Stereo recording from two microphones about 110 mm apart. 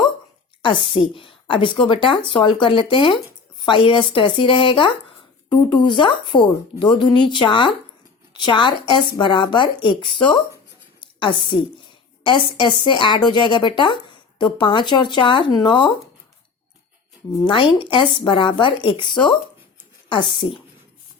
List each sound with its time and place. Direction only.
0.6 s speech: 50° left (ahead or behind)
11.0 s a sound: 50° left (ahead or behind)
12.2 s speech: 45° left (ahead or behind)
17.4 s speech: 50° left (ahead or behind)